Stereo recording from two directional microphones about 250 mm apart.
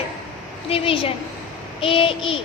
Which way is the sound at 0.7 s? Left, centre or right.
Left.